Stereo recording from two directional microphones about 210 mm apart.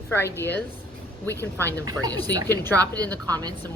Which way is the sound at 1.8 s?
20° right (ahead or behind).